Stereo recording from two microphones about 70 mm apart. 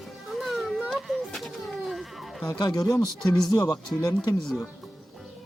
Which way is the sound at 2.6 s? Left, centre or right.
Left.